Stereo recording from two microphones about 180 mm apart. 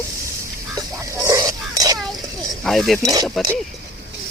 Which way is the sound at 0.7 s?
20° right (ahead or behind).